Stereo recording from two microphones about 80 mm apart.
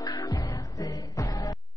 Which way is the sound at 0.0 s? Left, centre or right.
Left.